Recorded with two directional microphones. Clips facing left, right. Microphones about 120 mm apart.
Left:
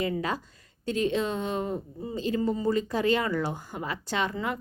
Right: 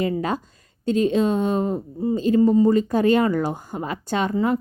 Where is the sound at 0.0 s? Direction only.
40° right (ahead or behind).